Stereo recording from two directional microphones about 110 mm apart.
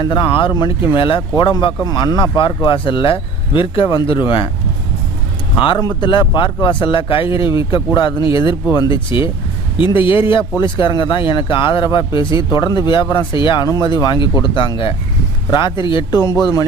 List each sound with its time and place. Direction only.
0.0 s speech: 45° left (ahead or behind)
1.8 s speech: 35° left (ahead or behind); by 4.4 s 50° left (ahead or behind)
5.5 s speech: 50° left (ahead or behind)